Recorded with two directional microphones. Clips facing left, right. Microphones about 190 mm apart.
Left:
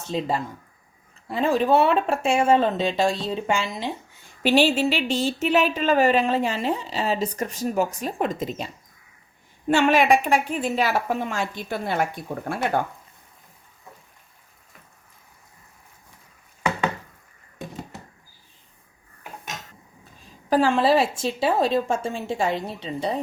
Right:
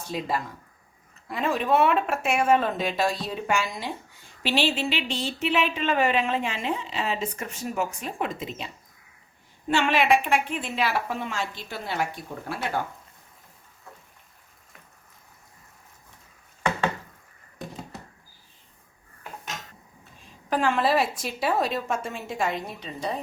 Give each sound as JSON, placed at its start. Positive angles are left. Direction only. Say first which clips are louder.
{"t": 0.0, "sound": "a woman's voice", "louder": "left 3 dB", "side_deg": 25}
{"t": 4.4, "sound": "a woman's voice", "louder": "left 6 dB", "side_deg": 45}
{"t": 20.5, "sound": "a woman's voice", "louder": "left 4 dB", "side_deg": 30}